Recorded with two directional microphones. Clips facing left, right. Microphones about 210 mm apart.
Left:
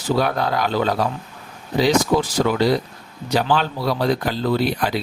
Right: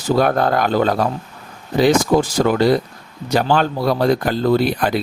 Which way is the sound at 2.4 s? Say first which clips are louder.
Right 3 dB; 50° right (ahead or behind).